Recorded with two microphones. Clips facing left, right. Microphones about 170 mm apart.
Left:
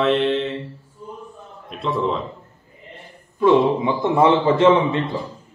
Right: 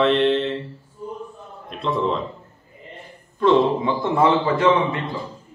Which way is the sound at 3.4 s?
15° left (ahead or behind).